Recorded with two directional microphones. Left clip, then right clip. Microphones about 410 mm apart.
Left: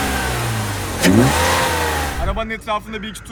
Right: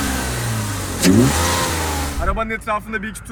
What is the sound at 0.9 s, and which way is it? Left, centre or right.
Car, centre.